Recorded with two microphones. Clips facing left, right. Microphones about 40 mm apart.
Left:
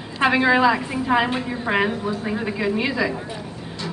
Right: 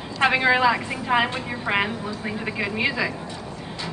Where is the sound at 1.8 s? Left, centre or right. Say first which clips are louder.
Left 5 dB; centre.